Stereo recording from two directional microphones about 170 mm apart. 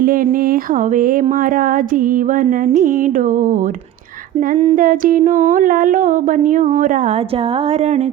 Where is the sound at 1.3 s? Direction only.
55° right (ahead or behind).